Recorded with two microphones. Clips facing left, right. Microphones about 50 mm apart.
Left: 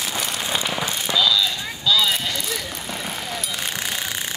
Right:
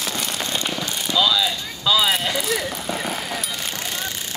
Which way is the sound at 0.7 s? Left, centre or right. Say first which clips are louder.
Left 1 dB; centre.